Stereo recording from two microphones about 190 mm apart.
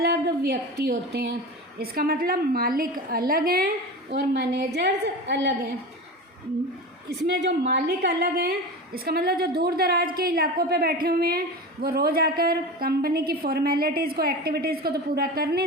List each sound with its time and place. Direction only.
0.0 s a woman's voice: 55° right (ahead or behind)
4.1 s a woman's voice: 65° right (ahead or behind)
7.1 s a woman's voice: 65° right (ahead or behind)